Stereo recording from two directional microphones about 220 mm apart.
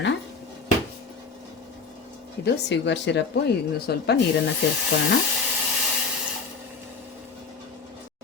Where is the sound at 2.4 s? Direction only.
50° left (ahead or behind).